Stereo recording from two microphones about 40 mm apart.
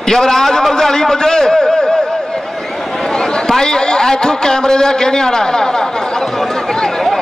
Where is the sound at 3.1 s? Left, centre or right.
Centre.